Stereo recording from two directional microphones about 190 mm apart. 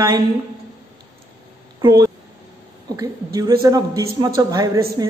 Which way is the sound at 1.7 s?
20° right (ahead or behind).